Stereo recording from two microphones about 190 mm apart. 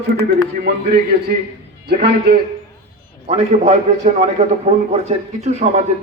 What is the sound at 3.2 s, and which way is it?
A man's voice, 35° right (ahead or behind).